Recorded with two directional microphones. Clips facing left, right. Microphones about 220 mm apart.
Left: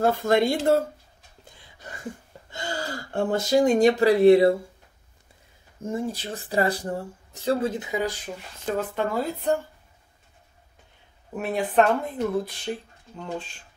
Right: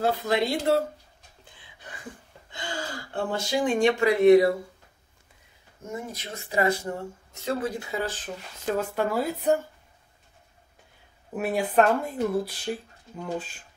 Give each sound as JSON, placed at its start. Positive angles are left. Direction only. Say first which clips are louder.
{"t": 0.0, "sound": "speech", "louder": "left 4 dB", "side_deg": 50}
{"t": 1.4, "sound": "a sound", "louder": "left 3 dB", "side_deg": 40}
{"t": 2.5, "sound": "speech", "louder": "left 3 dB", "side_deg": 40}
{"t": 5.8, "sound": "speech", "louder": "left 7 dB", "side_deg": 30}
{"t": 7.7, "sound": "speech", "louder": "left 3 dB", "side_deg": 15}
{"t": 8.6, "sound": "speech", "louder": "even", "side_deg": -5}
{"t": 11.3, "sound": "speech", "louder": "left 1 dB", "side_deg": -5}